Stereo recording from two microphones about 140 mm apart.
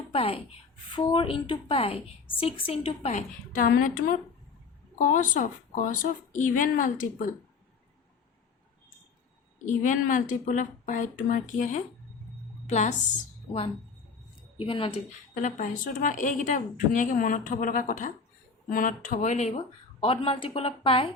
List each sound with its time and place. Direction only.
0.1 s speech: 45° left (ahead or behind)
3.5 s a woman's voice: 85° left
4.9 s a woman's voice: 70° left (ahead or behind)
9.6 s a woman's voice: 65° left (ahead or behind)
14.6 s speech: 40° left (ahead or behind)
15.4 s a woman's voice: 65° left (ahead or behind); by 21.1 s 40° left (ahead or behind)